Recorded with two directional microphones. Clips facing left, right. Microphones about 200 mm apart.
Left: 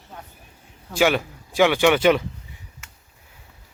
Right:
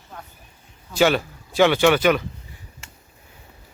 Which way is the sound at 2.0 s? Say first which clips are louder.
Left 1 dB; 25° left (ahead or behind).